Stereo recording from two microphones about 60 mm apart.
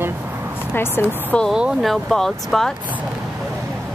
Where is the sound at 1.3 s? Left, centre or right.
Centre.